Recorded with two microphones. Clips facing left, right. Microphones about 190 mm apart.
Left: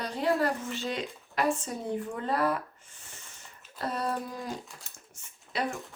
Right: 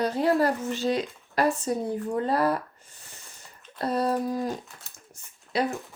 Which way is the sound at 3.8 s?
35° right (ahead or behind).